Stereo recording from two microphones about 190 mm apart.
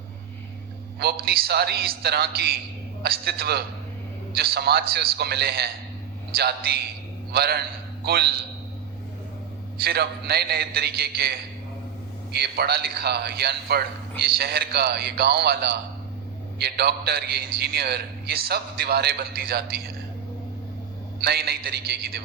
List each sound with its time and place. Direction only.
0.9 s a man's voice: 60° right (ahead or behind)
9.7 s a man's voice: 60° right (ahead or behind)
21.2 s a man's voice: 60° right (ahead or behind)